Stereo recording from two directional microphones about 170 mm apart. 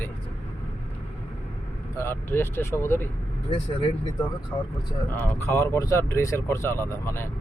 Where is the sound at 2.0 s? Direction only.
15° left (ahead or behind).